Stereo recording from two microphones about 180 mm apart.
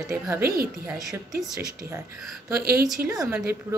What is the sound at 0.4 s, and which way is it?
Speech, 55° right (ahead or behind).